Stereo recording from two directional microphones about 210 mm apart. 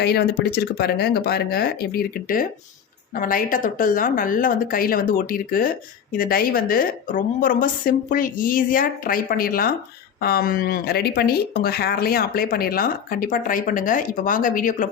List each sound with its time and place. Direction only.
0.0 s a woman's voice: 50° left (ahead or behind)